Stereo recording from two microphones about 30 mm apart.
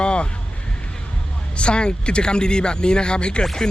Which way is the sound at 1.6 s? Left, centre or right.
Left.